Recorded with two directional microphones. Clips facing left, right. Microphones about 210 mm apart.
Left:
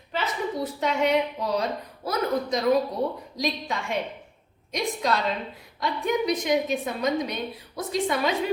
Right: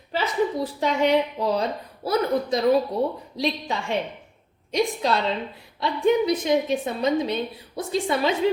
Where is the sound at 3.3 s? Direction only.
30° right (ahead or behind).